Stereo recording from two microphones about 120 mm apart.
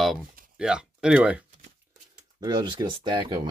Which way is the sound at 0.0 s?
5° right (ahead or behind).